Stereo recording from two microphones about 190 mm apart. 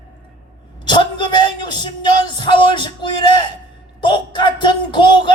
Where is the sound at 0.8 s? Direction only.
25° left (ahead or behind).